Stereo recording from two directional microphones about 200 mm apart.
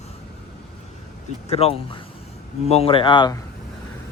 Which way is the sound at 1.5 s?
30° left (ahead or behind).